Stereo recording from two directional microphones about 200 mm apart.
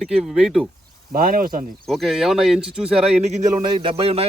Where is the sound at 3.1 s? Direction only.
35° right (ahead or behind).